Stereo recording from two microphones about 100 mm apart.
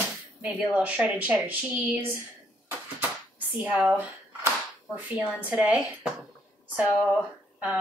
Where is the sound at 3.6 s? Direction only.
15° right (ahead or behind).